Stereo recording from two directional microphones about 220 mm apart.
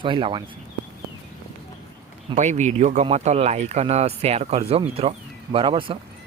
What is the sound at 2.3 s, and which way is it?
Speech, 30° right (ahead or behind).